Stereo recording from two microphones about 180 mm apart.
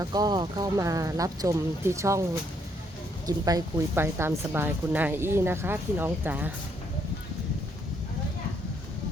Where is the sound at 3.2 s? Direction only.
20° right (ahead or behind).